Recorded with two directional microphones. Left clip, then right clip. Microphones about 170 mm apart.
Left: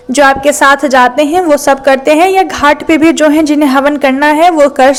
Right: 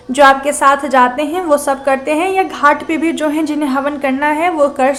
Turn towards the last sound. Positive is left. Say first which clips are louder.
# left 7 dB
turn(degrees=35)  # may be behind; listen again after turning